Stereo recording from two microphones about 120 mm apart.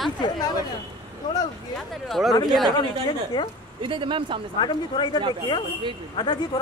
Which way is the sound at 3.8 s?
45° right (ahead or behind).